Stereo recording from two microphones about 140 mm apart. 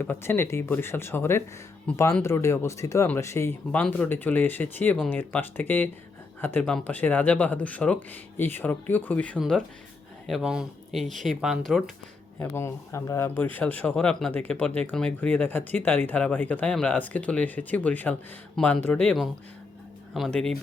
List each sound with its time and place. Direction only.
0.0 s speech: 15° left (ahead or behind); by 11.8 s centre (ahead or behind)
12.4 s speech: 20° left (ahead or behind)